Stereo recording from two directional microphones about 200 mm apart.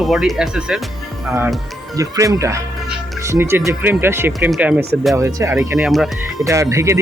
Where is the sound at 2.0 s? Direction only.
15° right (ahead or behind).